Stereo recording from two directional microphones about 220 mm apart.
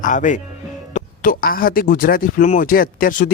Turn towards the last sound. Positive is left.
turn(degrees=40)  # may be behind; listen again after turning